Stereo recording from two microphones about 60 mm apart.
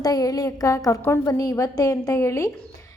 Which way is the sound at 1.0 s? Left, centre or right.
Left.